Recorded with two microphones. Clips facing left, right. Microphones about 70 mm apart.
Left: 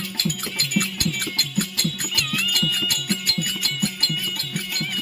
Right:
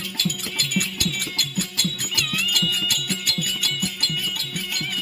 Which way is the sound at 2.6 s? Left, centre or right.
Centre.